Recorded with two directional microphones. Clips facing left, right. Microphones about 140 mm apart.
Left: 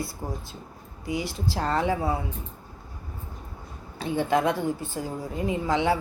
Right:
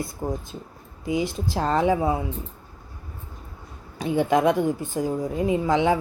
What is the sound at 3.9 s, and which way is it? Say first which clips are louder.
A woman's voice: right 3 dB; 15° right (ahead or behind).